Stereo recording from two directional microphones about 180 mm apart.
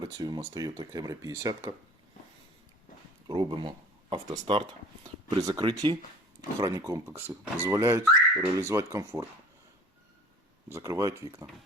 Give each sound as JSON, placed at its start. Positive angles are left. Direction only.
{"t": 0.0, "sound": "speech", "side_deg": -20}
{"t": 3.2, "sound": "speech", "side_deg": -25}
{"t": 10.7, "sound": "speech", "side_deg": -15}